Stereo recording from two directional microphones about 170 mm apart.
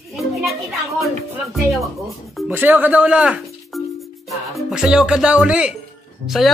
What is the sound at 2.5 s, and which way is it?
Speech, 10° right (ahead or behind).